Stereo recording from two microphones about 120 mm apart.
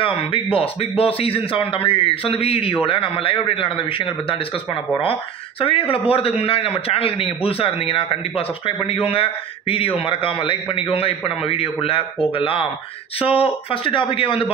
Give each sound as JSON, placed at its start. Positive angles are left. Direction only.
{"t": 0.0, "sound": "a man's voice", "side_deg": 50}
{"t": 5.6, "sound": "a man's voice", "side_deg": 50}